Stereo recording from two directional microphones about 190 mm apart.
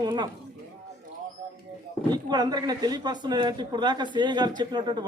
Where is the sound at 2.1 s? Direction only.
20° right (ahead or behind).